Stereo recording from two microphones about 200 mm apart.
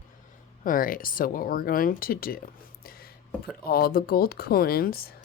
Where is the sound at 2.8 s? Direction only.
50° left (ahead or behind).